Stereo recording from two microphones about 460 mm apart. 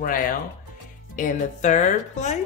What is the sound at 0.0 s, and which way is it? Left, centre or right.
Speech, centre.